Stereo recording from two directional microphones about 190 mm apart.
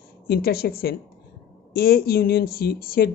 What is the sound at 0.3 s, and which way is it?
Speech, 55° left (ahead or behind).